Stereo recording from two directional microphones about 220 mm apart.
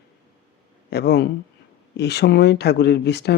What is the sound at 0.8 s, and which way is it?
Speech, 50° left (ahead or behind).